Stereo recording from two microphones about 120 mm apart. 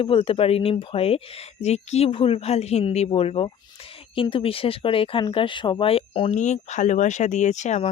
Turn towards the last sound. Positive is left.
turn(degrees=75)  # may be behind; listen again after turning